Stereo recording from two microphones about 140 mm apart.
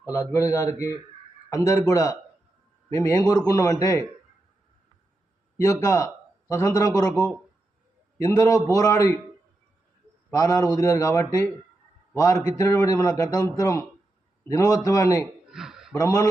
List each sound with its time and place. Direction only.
0.0 s a man's voice: 20° left (ahead or behind)
5.6 s a man's voice: 20° left (ahead or behind)
8.2 s a man's voice: 25° left (ahead or behind)
10.3 s a man's voice: 25° left (ahead or behind)
15.4 s a sound: 5° right (ahead or behind)
16.0 s a man's voice: 25° left (ahead or behind)